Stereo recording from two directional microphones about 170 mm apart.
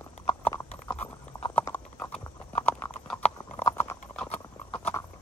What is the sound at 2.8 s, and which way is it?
Clip-clop, 10° left (ahead or behind).